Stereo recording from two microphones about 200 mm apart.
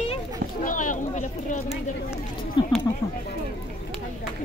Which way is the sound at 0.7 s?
40° left (ahead or behind).